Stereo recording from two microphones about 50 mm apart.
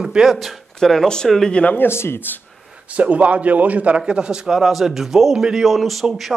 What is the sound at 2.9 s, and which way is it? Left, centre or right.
A man's voice, right.